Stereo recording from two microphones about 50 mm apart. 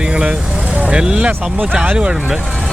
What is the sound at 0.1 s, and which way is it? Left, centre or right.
Vehicle, centre.